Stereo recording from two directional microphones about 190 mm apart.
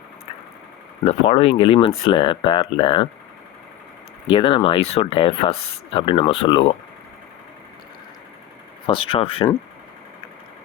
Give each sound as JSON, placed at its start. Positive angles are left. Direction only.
{"t": 1.0, "sound": "speech", "side_deg": 30}
{"t": 4.3, "sound": "speech", "side_deg": 25}
{"t": 8.9, "sound": "speech", "side_deg": 30}